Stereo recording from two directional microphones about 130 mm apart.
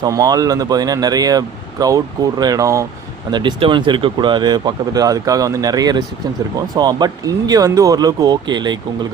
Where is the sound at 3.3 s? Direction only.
35° right (ahead or behind).